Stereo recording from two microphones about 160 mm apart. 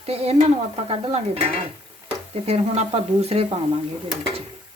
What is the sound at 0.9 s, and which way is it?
A woman's voice, 40° right (ahead or behind).